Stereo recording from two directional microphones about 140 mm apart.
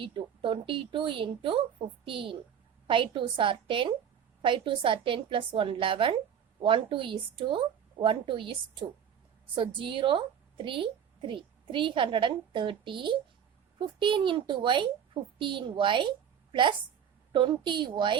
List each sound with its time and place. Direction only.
0.0 s a woman's voice: 40° right (ahead or behind)